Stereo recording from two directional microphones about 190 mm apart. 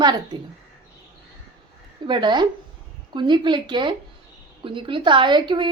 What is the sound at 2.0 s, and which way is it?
A woman's voice, 25° right (ahead or behind).